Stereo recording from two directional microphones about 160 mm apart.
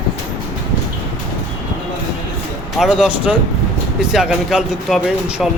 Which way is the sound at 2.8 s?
Centre (ahead or behind).